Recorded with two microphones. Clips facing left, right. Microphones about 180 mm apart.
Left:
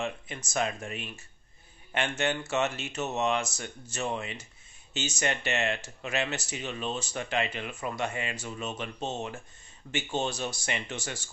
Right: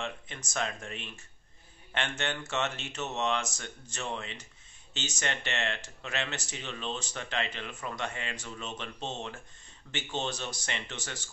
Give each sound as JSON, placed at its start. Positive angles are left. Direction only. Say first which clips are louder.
{"t": 0.0, "sound": "speech", "louder": "left 4 dB", "side_deg": 10}